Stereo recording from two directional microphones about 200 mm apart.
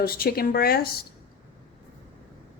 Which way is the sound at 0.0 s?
50° left (ahead or behind).